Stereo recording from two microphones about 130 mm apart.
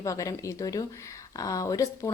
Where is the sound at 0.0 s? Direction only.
25° left (ahead or behind).